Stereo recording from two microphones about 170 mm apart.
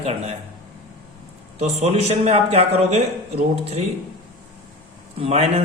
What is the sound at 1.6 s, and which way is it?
A man's voice, 40° right (ahead or behind).